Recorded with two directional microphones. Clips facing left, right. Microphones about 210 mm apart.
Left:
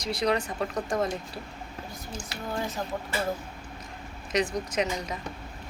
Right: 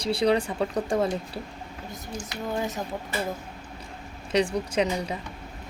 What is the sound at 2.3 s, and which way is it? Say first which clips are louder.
Speech: right 3 dB; 20° right (ahead or behind).